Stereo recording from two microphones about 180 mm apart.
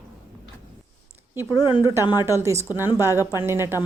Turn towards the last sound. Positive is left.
turn(degrees=-15)  # may be behind; listen again after turning